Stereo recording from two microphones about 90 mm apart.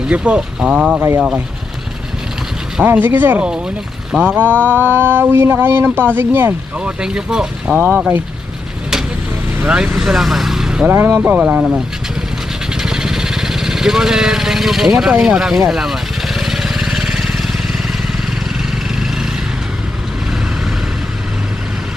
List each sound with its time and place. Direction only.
0.1 s speech: 10° right (ahead or behind)
2.8 s speech: 20° right (ahead or behind)
6.7 s speech: 10° right (ahead or behind)
7.8 s speech: 20° right (ahead or behind)
9.6 s speech: 5° right (ahead or behind)
10.9 s speech: 25° right (ahead or behind)
12.7 s vehicle: 5° right (ahead or behind)